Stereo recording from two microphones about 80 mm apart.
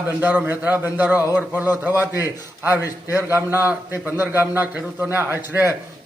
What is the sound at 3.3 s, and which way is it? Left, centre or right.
A man's voice, right.